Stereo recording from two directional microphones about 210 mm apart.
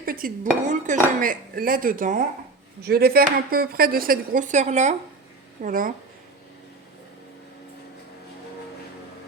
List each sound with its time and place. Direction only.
0.0 s dishes: 45° right (ahead or behind)
1.2 s speech: 40° right (ahead or behind)